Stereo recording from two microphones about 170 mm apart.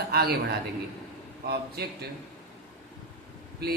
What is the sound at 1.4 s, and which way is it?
Speech, 70° right (ahead or behind).